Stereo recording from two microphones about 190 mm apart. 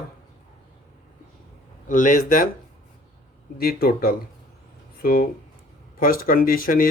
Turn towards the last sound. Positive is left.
turn(degrees=50)  # may be behind; listen again after turning